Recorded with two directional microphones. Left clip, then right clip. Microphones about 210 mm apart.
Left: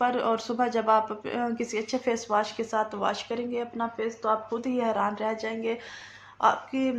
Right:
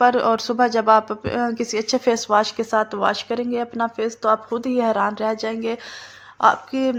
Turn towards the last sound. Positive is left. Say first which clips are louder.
# right 7 dB
turn(degrees=-40)  # may be behind; listen again after turning